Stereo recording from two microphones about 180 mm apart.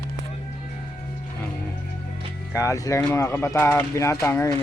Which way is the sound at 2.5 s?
20° left (ahead or behind).